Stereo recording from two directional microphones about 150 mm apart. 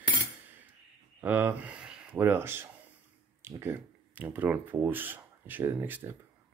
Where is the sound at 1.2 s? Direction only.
10° right (ahead or behind).